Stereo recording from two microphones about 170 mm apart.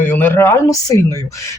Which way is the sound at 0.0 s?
10° left (ahead or behind).